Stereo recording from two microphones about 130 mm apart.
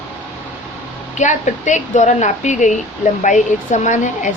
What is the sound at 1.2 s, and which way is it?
Speech, 70° left (ahead or behind).